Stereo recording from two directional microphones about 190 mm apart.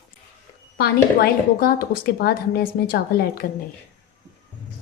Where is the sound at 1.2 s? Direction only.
50° left (ahead or behind).